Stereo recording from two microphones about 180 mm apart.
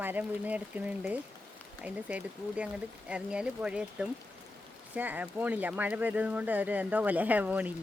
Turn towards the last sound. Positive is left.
turn(degrees=-10)  # may be behind; listen again after turning